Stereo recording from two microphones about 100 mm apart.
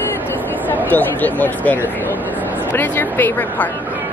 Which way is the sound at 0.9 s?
15° left (ahead or behind).